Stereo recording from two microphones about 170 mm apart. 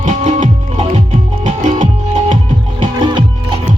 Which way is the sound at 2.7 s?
30° right (ahead or behind).